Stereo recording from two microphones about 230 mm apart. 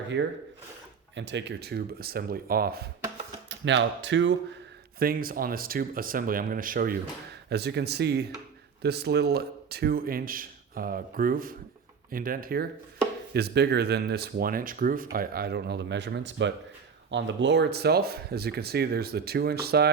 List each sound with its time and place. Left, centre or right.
1.1 s speech: right
3.7 s speech: right
4.9 s a man's voice: right